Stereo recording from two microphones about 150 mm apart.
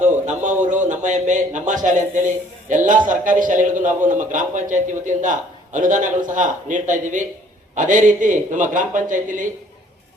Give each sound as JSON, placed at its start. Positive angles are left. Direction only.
{"t": 0.0, "sound": "a man's voice", "side_deg": -55}